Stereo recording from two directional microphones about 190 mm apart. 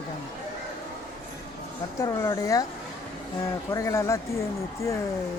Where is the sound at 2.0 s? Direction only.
15° left (ahead or behind).